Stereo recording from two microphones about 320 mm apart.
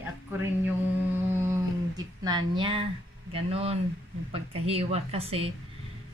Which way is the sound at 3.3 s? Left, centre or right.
Centre.